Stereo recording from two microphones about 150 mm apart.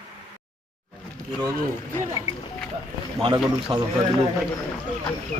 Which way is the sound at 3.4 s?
5° right (ahead or behind).